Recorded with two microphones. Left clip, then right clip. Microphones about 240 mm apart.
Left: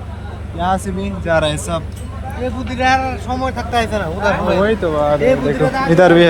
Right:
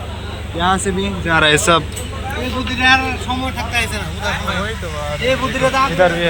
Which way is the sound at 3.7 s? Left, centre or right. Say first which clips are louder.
Left 4 dB; left.